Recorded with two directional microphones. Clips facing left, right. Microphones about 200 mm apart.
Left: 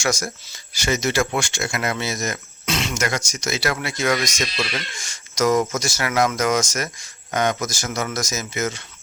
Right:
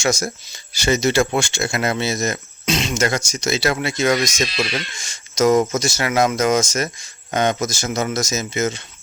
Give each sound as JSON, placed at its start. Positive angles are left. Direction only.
{"t": 0.0, "sound": "speech", "side_deg": -25}